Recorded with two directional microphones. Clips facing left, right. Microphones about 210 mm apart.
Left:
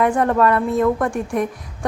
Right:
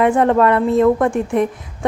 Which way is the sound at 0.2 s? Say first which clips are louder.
Right 3 dB; 20° right (ahead or behind).